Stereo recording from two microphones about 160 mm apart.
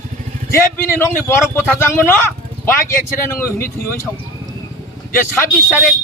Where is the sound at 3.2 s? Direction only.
15° left (ahead or behind).